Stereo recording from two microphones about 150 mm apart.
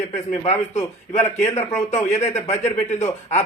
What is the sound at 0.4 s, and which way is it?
Speech, 45° left (ahead or behind).